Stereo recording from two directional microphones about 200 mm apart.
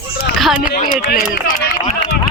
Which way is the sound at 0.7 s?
40° left (ahead or behind).